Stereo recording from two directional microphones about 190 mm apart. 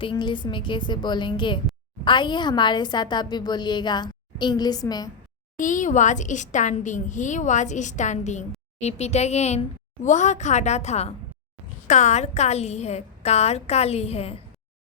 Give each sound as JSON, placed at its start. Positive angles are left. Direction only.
{"t": 0.0, "sound": "a woman's voice", "side_deg": 25}
{"t": 5.5, "sound": "a woman's voice", "side_deg": 40}